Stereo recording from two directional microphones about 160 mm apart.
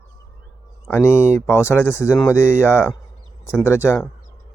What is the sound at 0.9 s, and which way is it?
Speech, 15° left (ahead or behind).